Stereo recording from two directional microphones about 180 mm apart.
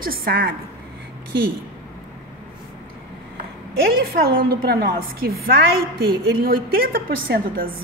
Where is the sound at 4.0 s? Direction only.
55° right (ahead or behind).